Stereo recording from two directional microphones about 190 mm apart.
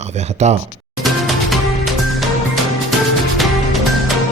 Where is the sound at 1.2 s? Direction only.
Centre (ahead or behind).